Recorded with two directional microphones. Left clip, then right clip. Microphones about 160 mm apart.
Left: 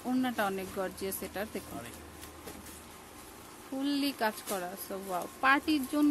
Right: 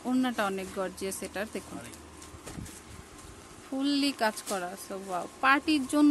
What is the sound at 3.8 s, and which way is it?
Speech, 20° right (ahead or behind).